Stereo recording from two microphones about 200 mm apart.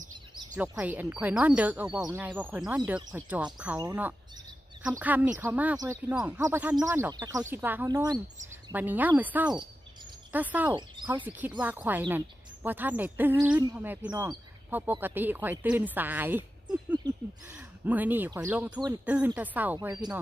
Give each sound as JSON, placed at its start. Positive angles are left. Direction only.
{"t": 0.6, "sound": "speech", "side_deg": -5}
{"t": 1.9, "sound": "speech", "side_deg": -20}
{"t": 2.2, "sound": "speech", "side_deg": -10}
{"t": 4.8, "sound": "speech", "side_deg": -10}
{"t": 17.0, "sound": "speech", "side_deg": -20}
{"t": 17.6, "sound": "speech", "side_deg": -10}